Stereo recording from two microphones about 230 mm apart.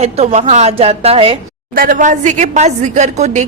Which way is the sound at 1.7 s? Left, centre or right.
Right.